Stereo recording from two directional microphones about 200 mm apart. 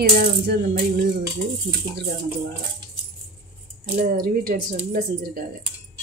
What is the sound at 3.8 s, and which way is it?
Speech, 40° right (ahead or behind).